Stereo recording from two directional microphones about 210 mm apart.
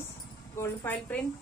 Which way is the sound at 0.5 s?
10° left (ahead or behind).